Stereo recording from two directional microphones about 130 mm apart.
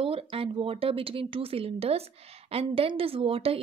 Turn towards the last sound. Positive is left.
turn(degrees=-45)  # may be behind; listen again after turning